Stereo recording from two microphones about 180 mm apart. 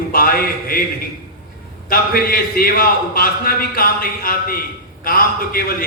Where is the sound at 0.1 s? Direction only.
55° left (ahead or behind).